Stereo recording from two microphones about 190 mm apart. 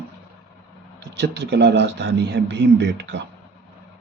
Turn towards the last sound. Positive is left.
turn(degrees=-65)  # may be behind; listen again after turning